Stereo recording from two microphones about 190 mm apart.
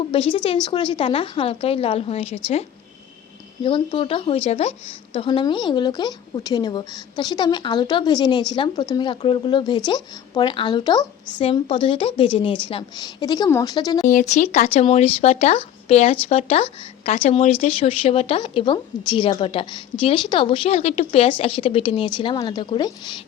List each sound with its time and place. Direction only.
0.1 s a woman's voice: 30° left (ahead or behind)
14.1 s a woman's voice: 40° left (ahead or behind); by 23.1 s 25° left (ahead or behind)